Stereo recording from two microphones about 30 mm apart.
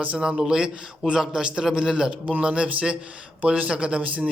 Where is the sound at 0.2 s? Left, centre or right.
Right.